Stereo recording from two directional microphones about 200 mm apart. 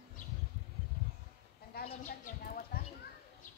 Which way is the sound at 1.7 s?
50° left (ahead or behind).